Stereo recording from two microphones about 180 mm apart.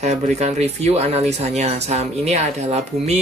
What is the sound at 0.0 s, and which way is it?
Speech, 35° right (ahead or behind).